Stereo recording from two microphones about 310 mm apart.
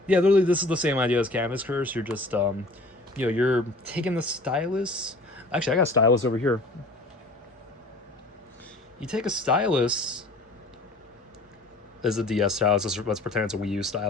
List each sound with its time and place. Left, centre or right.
0.1 s speech: centre
6.0 s speech: left
9.0 s speech: centre
12.0 s speech: centre